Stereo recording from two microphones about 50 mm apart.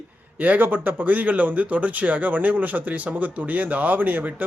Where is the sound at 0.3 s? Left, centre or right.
Right.